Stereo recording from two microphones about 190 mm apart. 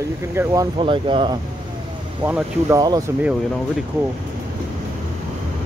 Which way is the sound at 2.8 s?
20° right (ahead or behind).